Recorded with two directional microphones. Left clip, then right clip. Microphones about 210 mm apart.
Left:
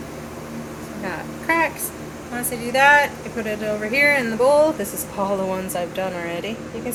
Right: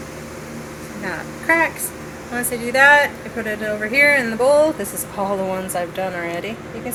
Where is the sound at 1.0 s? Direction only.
5° right (ahead or behind).